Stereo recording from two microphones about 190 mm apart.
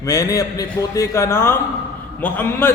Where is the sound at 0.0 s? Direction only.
15° left (ahead or behind).